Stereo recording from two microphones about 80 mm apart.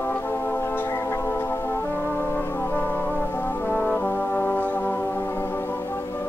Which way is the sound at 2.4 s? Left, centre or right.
Left.